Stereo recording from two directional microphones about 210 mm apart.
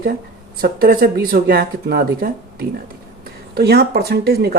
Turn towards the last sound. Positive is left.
turn(degrees=-50)  # may be behind; listen again after turning